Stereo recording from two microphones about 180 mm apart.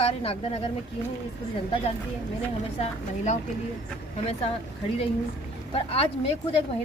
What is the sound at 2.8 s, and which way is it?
A woman's voice, 40° left (ahead or behind).